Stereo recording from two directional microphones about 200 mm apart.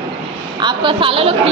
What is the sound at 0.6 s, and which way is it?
Speech, 25° right (ahead or behind).